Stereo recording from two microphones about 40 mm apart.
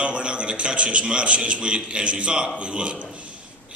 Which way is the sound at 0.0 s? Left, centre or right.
Right.